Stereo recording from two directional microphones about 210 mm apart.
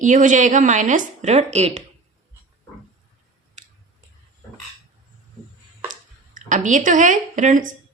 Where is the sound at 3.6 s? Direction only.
35° right (ahead or behind).